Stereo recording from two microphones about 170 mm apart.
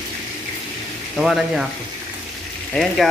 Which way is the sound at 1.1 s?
Centre (ahead or behind).